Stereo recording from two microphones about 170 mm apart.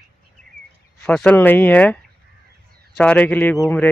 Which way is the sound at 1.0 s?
10° left (ahead or behind).